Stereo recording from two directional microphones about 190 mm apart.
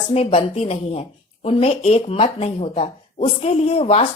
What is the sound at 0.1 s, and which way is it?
Speech, 30° left (ahead or behind).